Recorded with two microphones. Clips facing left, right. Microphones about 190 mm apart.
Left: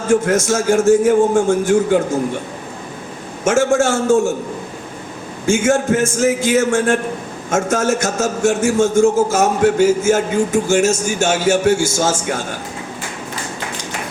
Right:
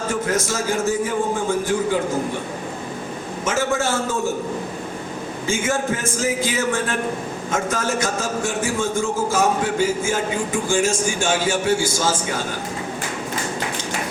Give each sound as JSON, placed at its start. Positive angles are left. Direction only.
{"t": 0.1, "sound": "a man's voice", "side_deg": 45}
{"t": 3.4, "sound": "a man's voice", "side_deg": 45}
{"t": 5.5, "sound": "a man's voice", "side_deg": 45}